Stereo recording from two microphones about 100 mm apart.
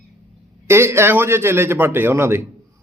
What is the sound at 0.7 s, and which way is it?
A man's voice, 25° right (ahead or behind).